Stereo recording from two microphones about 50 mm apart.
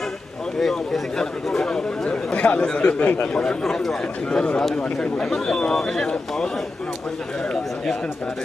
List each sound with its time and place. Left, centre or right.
0.6 s speech: centre
2.3 s a man's voice: left
3.6 s speech: centre
4.3 s a man's voice: centre